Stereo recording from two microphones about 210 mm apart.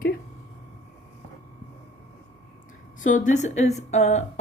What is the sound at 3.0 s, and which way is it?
Speech, 35° left (ahead or behind).